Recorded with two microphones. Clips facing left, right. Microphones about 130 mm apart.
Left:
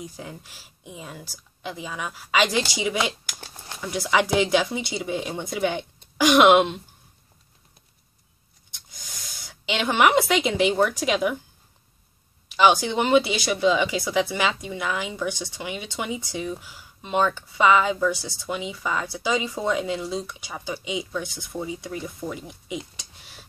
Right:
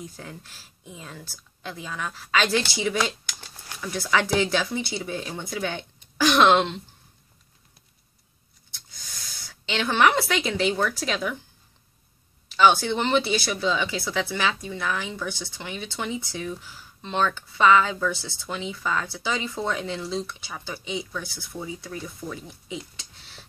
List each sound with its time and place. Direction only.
0.0 s speech: 10° left (ahead or behind)
9.5 s speech: 15° left (ahead or behind)
12.4 s speech: 15° left (ahead or behind)